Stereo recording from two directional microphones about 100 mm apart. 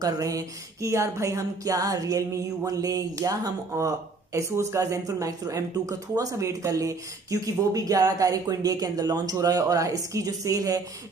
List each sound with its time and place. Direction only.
0.0 s music: 35° right (ahead or behind)